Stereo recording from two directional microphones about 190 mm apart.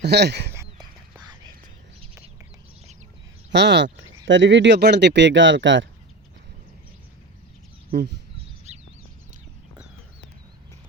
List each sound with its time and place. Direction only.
0.0 s speech: 60° right (ahead or behind)
1.1 s whispering: 20° right (ahead or behind)
3.5 s speech: 65° right (ahead or behind)
7.9 s chicken: 60° right (ahead or behind)
8.7 s a sound: 35° right (ahead or behind)